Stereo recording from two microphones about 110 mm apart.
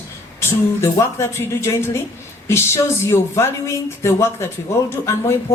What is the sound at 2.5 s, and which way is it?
Speech, 25° left (ahead or behind).